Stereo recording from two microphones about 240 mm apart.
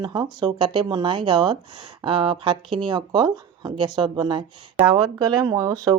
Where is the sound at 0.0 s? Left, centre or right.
Centre.